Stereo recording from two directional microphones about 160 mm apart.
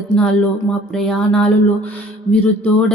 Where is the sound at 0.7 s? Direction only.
5° left (ahead or behind).